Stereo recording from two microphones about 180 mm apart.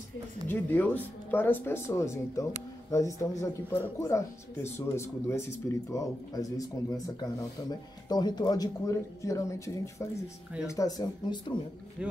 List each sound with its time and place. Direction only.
0.5 s speech: 10° left (ahead or behind)
12.0 s speech: 5° right (ahead or behind)